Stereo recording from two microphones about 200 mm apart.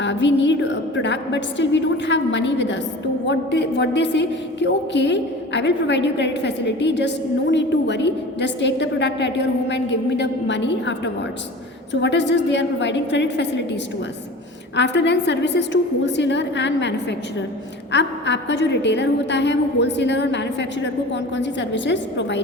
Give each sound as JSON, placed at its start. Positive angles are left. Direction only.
{"t": 0.0, "sound": "a woman's voice", "side_deg": 65}
{"t": 14.8, "sound": "a woman's voice", "side_deg": 60}